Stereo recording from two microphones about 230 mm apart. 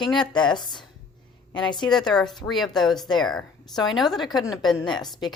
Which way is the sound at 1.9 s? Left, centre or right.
Centre.